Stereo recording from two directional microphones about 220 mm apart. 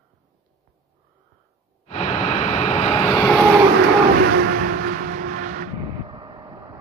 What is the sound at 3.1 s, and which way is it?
Vehicle, 10° left (ahead or behind).